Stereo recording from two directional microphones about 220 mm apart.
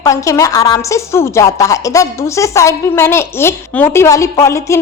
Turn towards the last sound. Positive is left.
turn(degrees=15)  # may be behind; listen again after turning